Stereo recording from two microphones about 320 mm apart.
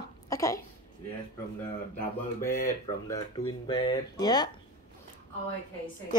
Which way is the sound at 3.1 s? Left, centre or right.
Centre.